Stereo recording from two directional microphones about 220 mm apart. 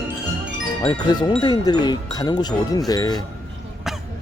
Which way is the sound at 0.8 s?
20° left (ahead or behind).